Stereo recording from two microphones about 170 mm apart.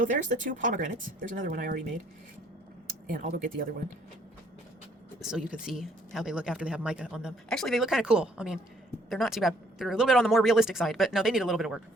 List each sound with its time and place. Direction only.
0.0 s speech: 50° right (ahead or behind)
3.1 s speech: 55° right (ahead or behind)
5.2 s speech: 5° right (ahead or behind)